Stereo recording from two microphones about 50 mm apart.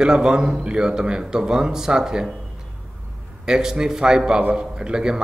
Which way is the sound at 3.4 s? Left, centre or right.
Centre.